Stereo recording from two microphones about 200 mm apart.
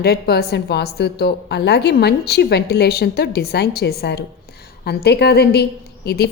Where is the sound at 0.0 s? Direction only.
55° left (ahead or behind).